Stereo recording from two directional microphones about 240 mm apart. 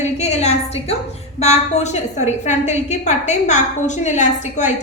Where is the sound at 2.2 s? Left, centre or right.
Left.